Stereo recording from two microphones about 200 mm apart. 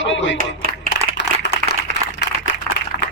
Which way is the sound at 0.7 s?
50° left (ahead or behind).